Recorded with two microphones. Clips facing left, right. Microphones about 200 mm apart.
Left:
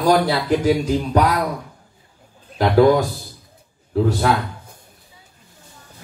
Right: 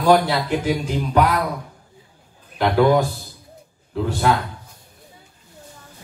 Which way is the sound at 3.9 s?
40° left (ahead or behind).